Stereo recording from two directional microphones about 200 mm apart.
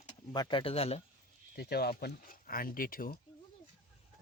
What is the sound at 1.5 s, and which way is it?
Speech, 50° left (ahead or behind).